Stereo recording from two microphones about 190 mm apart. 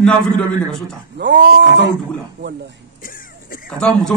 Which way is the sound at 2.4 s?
65° right (ahead or behind).